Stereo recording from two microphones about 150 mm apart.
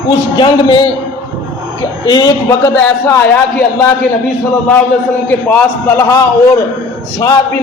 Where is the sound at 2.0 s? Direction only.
25° left (ahead or behind).